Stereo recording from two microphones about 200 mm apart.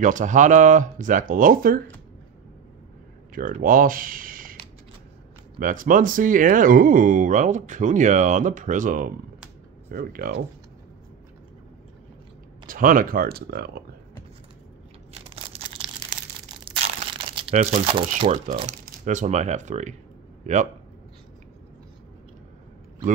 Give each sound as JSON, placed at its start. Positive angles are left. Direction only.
{"t": 0.0, "sound": "speech", "side_deg": -40}
{"t": 3.3, "sound": "speech", "side_deg": -45}
{"t": 5.6, "sound": "speech", "side_deg": -40}
{"t": 12.6, "sound": "speech", "side_deg": -45}
{"t": 15.2, "sound": "a sound", "side_deg": -25}
{"t": 17.2, "sound": "crumpling", "side_deg": -25}
{"t": 17.6, "sound": "speech", "side_deg": -35}